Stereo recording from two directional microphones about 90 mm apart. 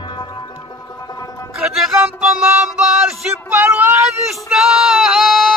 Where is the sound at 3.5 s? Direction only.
20° right (ahead or behind).